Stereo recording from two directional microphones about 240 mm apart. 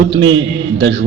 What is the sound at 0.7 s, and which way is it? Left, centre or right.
Speech, right.